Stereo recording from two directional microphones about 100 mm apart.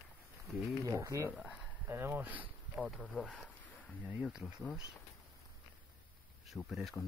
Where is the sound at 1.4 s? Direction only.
5° right (ahead or behind).